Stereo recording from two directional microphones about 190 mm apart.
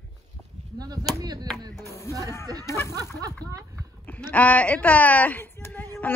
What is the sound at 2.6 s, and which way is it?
Speech, 15° left (ahead or behind).